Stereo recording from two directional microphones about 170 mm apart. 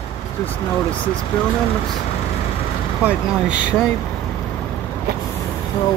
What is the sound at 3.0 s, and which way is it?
Speech, 10° right (ahead or behind).